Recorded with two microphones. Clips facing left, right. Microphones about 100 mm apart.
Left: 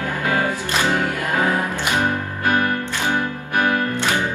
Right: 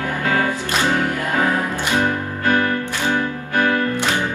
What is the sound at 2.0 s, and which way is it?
Music, 20° left (ahead or behind).